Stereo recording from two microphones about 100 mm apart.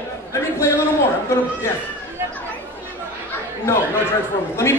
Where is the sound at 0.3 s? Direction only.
30° left (ahead or behind).